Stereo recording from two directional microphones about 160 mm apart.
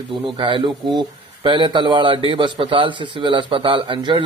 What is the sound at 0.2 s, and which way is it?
Speech, 35° right (ahead or behind).